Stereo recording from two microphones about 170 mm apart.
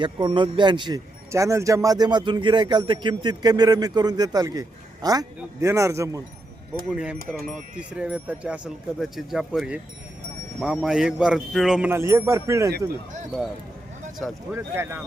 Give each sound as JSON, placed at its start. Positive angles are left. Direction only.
{"t": 0.0, "sound": "speech", "side_deg": -25}
{"t": 6.9, "sound": "a sound", "side_deg": -5}
{"t": 11.9, "sound": "speech", "side_deg": -15}
{"t": 14.5, "sound": "speech", "side_deg": -15}